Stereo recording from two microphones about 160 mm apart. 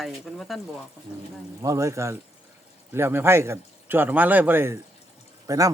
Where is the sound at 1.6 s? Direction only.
20° right (ahead or behind).